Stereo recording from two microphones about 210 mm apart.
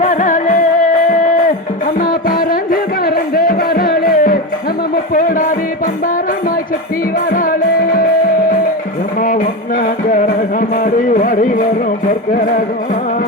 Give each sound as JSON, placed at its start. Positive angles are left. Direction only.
{"t": 0.0, "sound": "music", "side_deg": 35}
{"t": 7.3, "sound": "music", "side_deg": 40}
{"t": 9.2, "sound": "music", "side_deg": 40}